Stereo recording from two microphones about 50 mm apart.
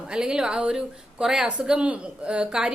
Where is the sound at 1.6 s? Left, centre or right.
Right.